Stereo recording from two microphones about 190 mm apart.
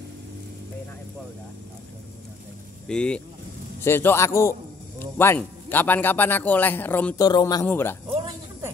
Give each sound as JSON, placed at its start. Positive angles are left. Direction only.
{"t": 2.9, "sound": "a man's voice", "side_deg": 5}
{"t": 7.2, "sound": "speech", "side_deg": 20}